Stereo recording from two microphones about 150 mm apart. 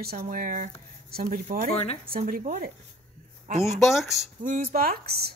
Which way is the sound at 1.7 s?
45° left (ahead or behind).